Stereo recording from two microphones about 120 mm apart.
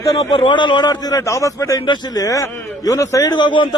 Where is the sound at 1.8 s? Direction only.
40° left (ahead or behind).